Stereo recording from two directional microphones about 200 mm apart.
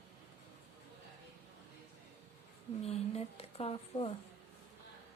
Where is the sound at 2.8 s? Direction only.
30° left (ahead or behind).